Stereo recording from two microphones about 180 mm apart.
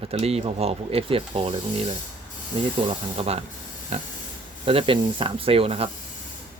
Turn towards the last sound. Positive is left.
turn(degrees=-35)  # may be behind; listen again after turning